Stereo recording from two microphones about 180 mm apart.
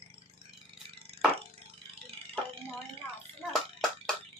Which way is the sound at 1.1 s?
30° right (ahead or behind).